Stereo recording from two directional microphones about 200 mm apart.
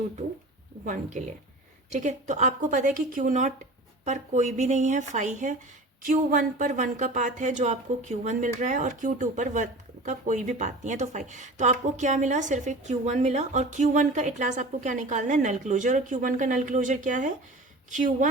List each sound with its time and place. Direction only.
0.9 s speech: 35° right (ahead or behind)